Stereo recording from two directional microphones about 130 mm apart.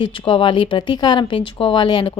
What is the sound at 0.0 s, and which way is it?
A woman's voice, 40° left (ahead or behind).